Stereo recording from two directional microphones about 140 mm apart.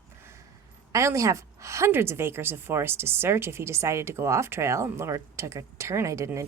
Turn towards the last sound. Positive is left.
turn(degrees=-20)  # may be behind; listen again after turning